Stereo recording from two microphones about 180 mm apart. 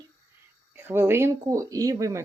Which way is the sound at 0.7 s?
10° right (ahead or behind).